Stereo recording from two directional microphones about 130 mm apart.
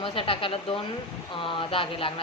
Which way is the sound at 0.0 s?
45° left (ahead or behind).